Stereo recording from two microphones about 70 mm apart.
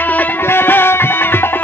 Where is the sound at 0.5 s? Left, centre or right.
Left.